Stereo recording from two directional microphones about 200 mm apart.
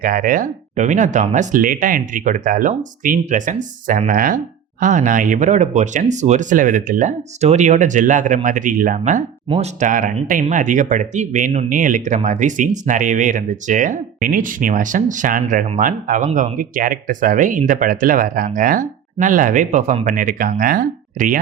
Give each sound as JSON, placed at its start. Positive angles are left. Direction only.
{"t": 0.0, "sound": "speech", "side_deg": -45}